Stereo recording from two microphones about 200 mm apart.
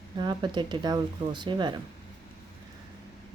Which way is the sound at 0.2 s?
20° right (ahead or behind).